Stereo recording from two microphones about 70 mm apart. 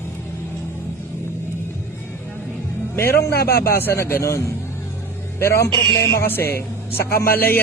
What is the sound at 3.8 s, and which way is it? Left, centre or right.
A man's voice, left.